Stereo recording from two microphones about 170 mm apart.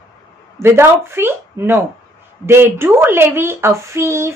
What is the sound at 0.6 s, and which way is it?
A woman's voice, 15° right (ahead or behind).